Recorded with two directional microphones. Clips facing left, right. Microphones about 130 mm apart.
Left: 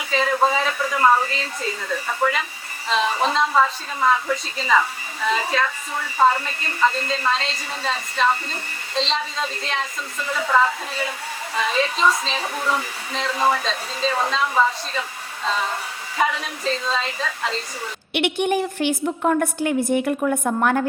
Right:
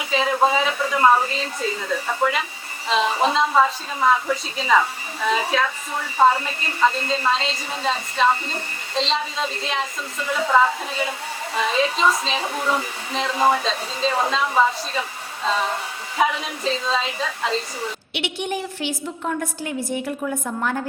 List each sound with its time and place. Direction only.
0.1 s a woman's voice: 5° right (ahead or behind)
13.3 s speech: 20° right (ahead or behind)
13.6 s a woman's voice: centre (ahead or behind)
16.1 s a woman's voice: 5° right (ahead or behind)
18.1 s a woman's voice: 55° left (ahead or behind)